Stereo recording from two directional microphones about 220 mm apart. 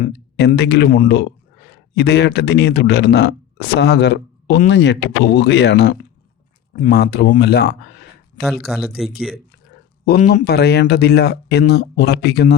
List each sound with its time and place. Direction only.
0.3 s speech: 50° left (ahead or behind)
10.1 s speech: 40° left (ahead or behind)